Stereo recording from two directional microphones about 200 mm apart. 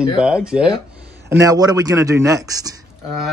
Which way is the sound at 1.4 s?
20° right (ahead or behind).